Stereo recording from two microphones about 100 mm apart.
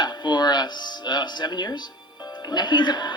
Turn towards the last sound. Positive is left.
turn(degrees=45)  # may be behind; listen again after turning